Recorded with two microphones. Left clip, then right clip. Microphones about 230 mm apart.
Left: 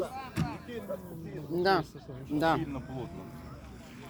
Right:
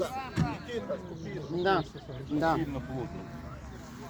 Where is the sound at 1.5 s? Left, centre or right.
Left.